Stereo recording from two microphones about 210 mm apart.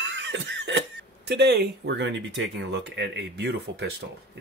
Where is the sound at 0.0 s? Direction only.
55° right (ahead or behind).